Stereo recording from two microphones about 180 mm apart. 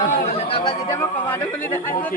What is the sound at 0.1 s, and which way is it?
Chatter, 35° left (ahead or behind).